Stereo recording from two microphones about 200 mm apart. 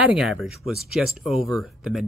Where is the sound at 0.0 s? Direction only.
5° right (ahead or behind).